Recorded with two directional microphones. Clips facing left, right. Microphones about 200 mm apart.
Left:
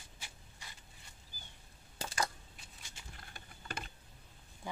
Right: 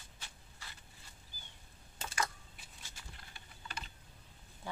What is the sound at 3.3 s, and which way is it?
Typing, 50° left (ahead or behind).